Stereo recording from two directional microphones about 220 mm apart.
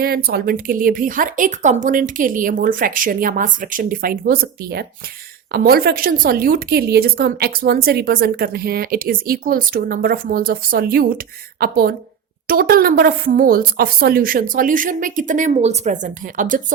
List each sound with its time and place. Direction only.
0.0 s a woman's voice: 45° right (ahead or behind)